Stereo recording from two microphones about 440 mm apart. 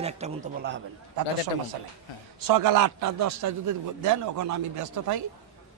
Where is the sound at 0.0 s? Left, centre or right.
Centre.